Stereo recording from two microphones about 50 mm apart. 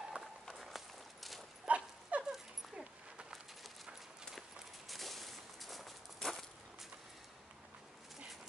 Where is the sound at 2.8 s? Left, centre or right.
Centre.